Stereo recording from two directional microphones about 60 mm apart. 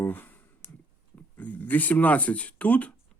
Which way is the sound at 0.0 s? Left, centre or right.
Left.